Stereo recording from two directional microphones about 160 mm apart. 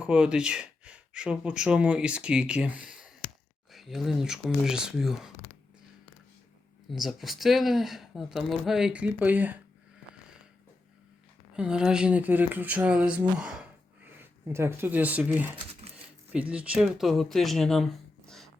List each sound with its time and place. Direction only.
0.0 s speech: 5° right (ahead or behind)
6.8 s speech: centre (ahead or behind)
11.5 s speech: 5° right (ahead or behind)